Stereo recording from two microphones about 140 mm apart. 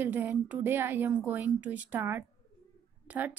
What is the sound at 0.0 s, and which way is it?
A woman's voice, 15° right (ahead or behind).